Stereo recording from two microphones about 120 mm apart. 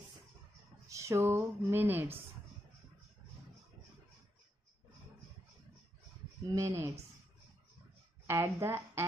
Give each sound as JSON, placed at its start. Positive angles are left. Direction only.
{"t": 0.8, "sound": "speech", "side_deg": -25}
{"t": 6.4, "sound": "speech", "side_deg": -25}
{"t": 8.3, "sound": "speech", "side_deg": -20}